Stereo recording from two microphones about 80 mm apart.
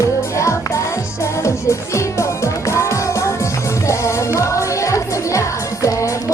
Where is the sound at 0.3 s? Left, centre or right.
Left.